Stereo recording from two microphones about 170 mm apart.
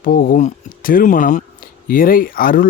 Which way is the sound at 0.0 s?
55° left (ahead or behind).